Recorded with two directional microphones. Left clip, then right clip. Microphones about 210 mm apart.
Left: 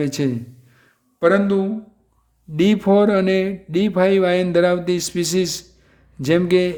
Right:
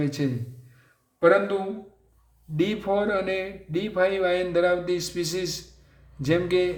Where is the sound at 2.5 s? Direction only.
45° left (ahead or behind).